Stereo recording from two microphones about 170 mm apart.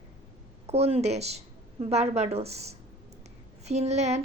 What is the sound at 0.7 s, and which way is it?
Speech, 35° right (ahead or behind).